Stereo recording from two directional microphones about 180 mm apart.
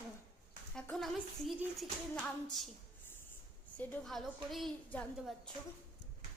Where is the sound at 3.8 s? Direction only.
Centre (ahead or behind).